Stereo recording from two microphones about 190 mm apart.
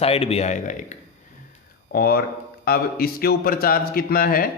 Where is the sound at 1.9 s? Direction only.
55° left (ahead or behind).